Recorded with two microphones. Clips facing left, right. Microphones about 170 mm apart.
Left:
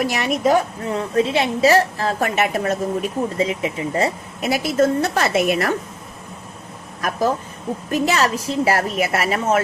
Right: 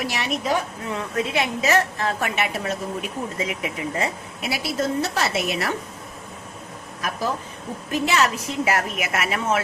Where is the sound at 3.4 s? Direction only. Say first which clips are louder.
Left 6 dB; 30° left (ahead or behind).